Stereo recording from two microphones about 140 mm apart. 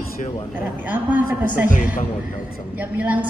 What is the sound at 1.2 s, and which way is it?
Speech, 90° left.